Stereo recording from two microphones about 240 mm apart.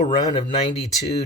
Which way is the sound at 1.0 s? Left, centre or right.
Left.